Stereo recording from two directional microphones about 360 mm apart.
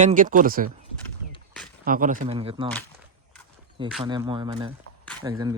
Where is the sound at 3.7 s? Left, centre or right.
Centre.